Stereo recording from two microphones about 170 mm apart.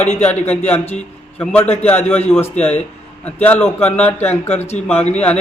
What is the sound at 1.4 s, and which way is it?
Speech, 10° left (ahead or behind).